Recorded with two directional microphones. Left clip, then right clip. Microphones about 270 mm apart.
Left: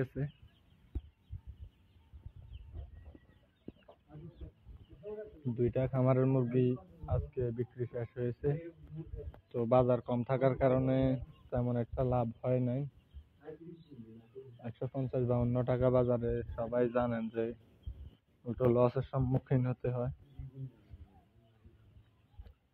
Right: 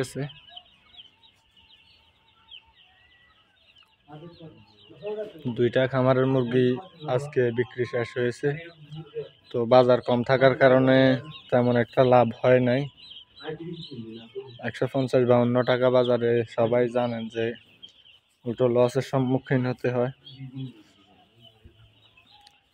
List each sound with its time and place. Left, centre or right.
0.0 s fowl: centre
5.6 s speech: right
14.6 s speech: right
15.6 s speech: centre